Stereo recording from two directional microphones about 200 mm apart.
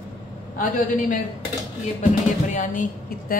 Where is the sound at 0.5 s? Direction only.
40° left (ahead or behind).